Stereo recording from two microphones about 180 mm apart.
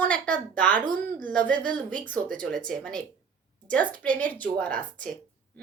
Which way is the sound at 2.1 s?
5° left (ahead or behind).